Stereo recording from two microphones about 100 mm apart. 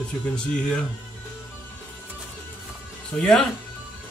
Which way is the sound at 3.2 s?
5° left (ahead or behind).